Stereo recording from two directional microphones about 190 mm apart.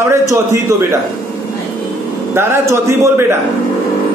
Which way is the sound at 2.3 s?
15° right (ahead or behind).